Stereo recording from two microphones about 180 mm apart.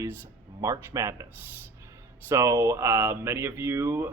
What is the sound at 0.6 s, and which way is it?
Speech, 15° right (ahead or behind).